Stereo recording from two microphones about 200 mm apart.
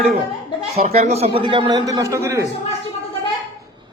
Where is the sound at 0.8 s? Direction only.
30° right (ahead or behind); by 2.5 s 15° right (ahead or behind).